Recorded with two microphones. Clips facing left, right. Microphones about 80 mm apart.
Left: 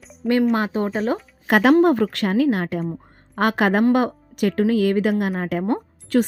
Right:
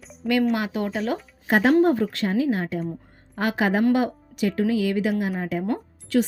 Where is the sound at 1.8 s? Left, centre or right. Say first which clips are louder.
Left 3 dB; left.